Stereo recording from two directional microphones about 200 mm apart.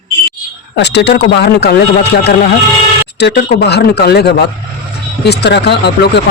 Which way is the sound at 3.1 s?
55° left (ahead or behind).